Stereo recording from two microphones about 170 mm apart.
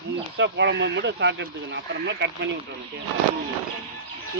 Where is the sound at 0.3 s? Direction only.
90° right.